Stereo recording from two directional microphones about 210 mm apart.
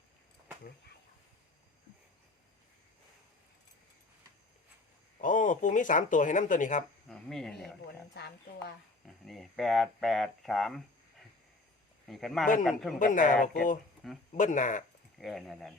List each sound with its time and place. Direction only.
5.2 s speech: 40° left (ahead or behind)
7.1 s speech: centre (ahead or behind)
8.1 s speech: 50° left (ahead or behind)
9.0 s speech: centre (ahead or behind)
12.0 s speech: centre (ahead or behind)
13.0 s speech: 40° left (ahead or behind)
15.2 s speech: centre (ahead or behind)